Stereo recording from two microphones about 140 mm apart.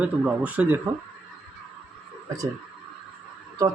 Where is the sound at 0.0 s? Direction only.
10° right (ahead or behind).